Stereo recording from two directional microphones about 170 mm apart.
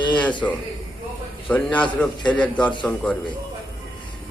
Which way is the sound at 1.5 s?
10° left (ahead or behind).